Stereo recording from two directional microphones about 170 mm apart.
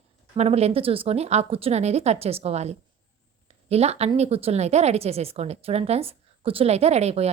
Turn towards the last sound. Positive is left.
turn(degrees=-40)  # may be behind; listen again after turning